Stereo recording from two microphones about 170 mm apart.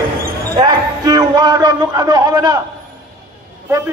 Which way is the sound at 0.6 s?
25° right (ahead or behind).